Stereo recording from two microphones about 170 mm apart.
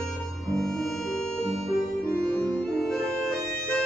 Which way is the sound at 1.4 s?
40° right (ahead or behind).